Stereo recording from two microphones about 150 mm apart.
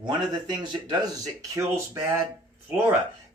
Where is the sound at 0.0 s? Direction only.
30° right (ahead or behind).